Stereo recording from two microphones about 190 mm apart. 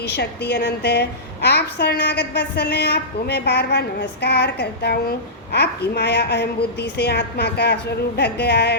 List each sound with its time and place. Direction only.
0.1 s a woman's voice: 60° left (ahead or behind)